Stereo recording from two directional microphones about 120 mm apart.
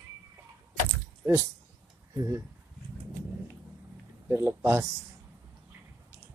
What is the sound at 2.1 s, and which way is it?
Speech, 30° right (ahead or behind).